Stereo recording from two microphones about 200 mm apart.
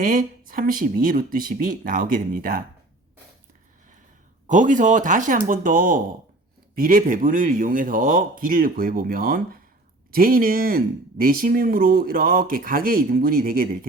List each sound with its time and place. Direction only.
0.0 s speech: 45° right (ahead or behind)
4.4 s speech: 40° right (ahead or behind)